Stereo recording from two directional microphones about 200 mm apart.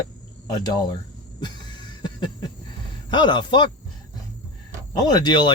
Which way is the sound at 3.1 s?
20° left (ahead or behind).